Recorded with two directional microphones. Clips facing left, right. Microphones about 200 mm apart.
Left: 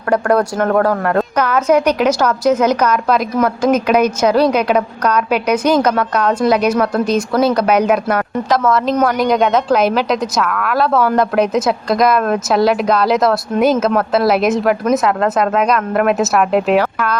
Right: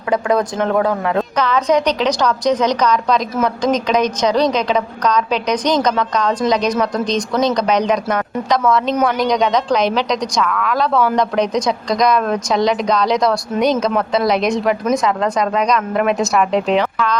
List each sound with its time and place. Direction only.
0.1 s a woman's voice: 10° left (ahead or behind)